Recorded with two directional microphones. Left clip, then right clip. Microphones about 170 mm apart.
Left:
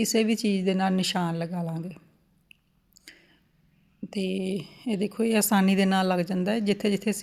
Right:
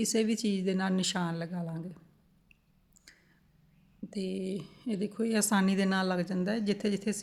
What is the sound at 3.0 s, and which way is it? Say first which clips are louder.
Whispering: left 8 dB; 20° left (ahead or behind).